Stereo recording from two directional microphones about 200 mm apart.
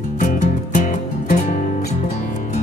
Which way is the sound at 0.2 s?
40° left (ahead or behind).